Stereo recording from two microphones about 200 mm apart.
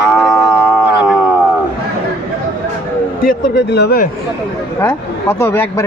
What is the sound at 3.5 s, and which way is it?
Speech, 55° left (ahead or behind).